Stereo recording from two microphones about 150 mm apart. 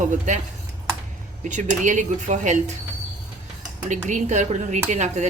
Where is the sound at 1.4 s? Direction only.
55° right (ahead or behind).